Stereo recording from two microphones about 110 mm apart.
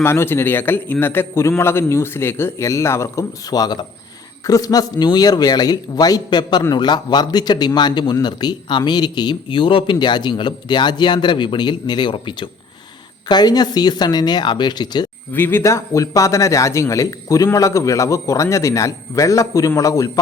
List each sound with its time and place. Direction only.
0.0 s a man's voice: 20° left (ahead or behind); by 15.0 s 40° left (ahead or behind)
15.3 s a man's voice: 20° left (ahead or behind)